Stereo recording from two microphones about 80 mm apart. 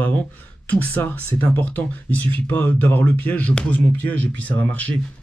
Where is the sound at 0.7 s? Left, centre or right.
Centre.